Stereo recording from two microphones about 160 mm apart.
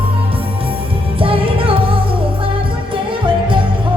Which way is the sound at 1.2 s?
35° right (ahead or behind).